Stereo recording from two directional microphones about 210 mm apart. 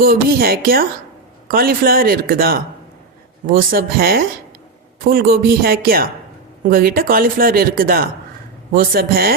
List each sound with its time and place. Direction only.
0.0 s a man's voice: 45° right (ahead or behind)